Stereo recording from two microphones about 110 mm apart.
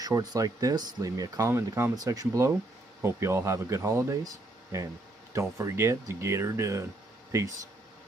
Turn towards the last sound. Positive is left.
turn(degrees=-30)  # may be behind; listen again after turning